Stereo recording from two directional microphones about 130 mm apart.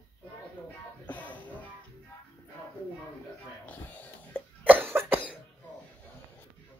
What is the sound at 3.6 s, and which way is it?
Music, 10° left (ahead or behind).